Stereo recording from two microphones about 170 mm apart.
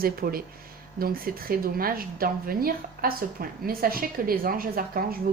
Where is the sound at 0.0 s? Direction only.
60° right (ahead or behind).